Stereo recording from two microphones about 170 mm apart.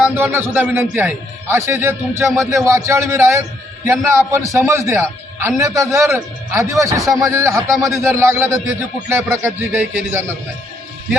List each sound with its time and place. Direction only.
0.1 s a man's voice: 10° right (ahead or behind)